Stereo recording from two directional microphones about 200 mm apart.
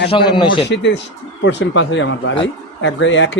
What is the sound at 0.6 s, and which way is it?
A man's voice, 60° left (ahead or behind).